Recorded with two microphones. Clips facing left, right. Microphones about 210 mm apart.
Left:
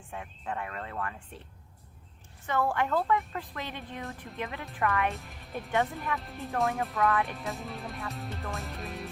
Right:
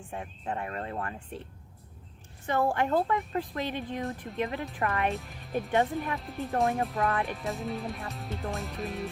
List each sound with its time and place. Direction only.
0.1 s a woman's voice: 35° right (ahead or behind)
2.5 s a woman's voice: 35° right (ahead or behind)
5.0 s music: centre (ahead or behind)
5.7 s a woman's voice: 35° right (ahead or behind)
6.1 s music: centre (ahead or behind)
6.9 s a woman's voice: 30° right (ahead or behind)
7.3 s music: centre (ahead or behind)